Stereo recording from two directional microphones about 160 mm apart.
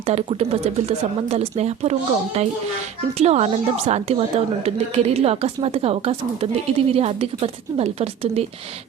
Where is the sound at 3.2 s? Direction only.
40° right (ahead or behind).